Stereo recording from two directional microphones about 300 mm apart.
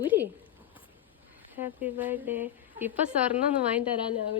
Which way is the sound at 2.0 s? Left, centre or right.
Centre.